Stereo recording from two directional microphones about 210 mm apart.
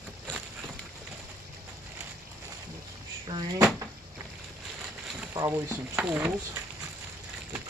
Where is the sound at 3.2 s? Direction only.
20° right (ahead or behind).